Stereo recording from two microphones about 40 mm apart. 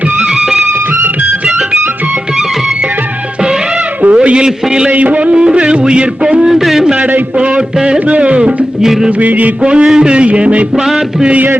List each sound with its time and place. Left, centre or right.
4.0 s a sound: right
4.4 s music: centre
4.9 s music: right
6.4 s a man's voice: centre
7.9 s music: right
8.8 s a man's voice: centre
9.0 s music: right
9.6 s music: right